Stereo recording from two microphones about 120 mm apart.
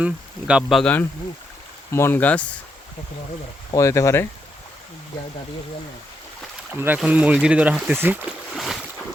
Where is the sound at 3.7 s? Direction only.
25° left (ahead or behind).